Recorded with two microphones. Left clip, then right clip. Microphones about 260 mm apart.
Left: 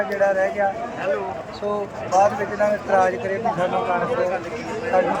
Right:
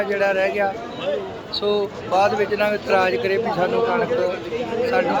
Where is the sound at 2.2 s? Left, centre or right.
Centre.